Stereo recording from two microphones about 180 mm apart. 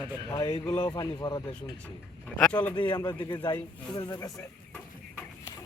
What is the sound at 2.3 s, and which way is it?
Speech, 10° left (ahead or behind).